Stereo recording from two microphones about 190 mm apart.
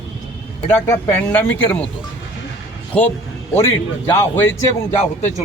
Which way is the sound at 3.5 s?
10° left (ahead or behind).